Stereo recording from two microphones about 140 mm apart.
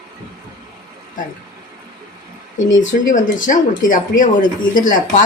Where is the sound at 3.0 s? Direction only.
65° left (ahead or behind).